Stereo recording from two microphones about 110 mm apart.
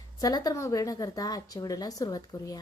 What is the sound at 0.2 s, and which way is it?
A woman's voice, 35° left (ahead or behind).